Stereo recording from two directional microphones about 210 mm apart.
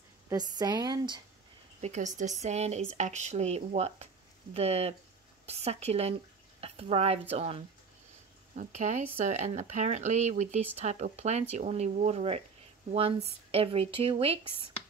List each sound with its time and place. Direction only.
0.3 s speech: 20° right (ahead or behind)
1.8 s speech: 35° right (ahead or behind)
13.5 s speech: 25° right (ahead or behind)